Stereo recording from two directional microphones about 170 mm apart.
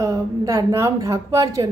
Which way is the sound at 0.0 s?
20° right (ahead or behind).